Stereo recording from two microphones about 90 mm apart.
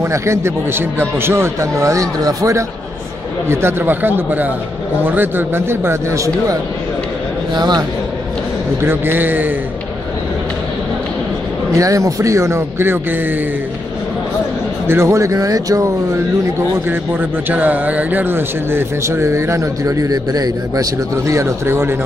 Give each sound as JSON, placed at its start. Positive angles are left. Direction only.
{"t": 0.0, "sound": "a man's voice", "side_deg": -30}
{"t": 3.4, "sound": "speech", "side_deg": -25}
{"t": 7.5, "sound": "a man's voice", "side_deg": -50}
{"t": 8.8, "sound": "speech", "side_deg": -25}
{"t": 11.7, "sound": "a man's voice", "side_deg": -40}
{"t": 14.9, "sound": "a man's voice", "side_deg": -30}
{"t": 16.9, "sound": "speech", "side_deg": -25}